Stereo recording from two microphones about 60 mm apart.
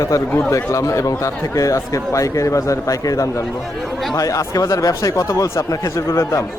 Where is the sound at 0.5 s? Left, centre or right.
Left.